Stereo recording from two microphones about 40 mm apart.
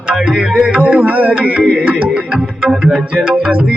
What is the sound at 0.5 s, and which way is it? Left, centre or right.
Music, right.